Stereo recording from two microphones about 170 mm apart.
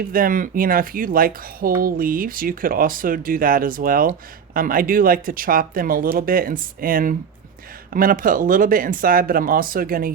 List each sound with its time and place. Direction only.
0.1 s speech: 55° right (ahead or behind)